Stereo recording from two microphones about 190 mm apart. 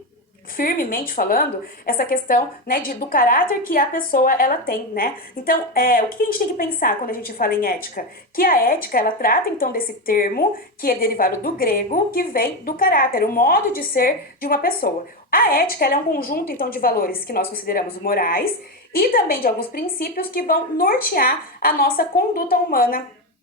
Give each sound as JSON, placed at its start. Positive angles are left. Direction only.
{"t": 0.5, "sound": "a woman's voice", "side_deg": 50}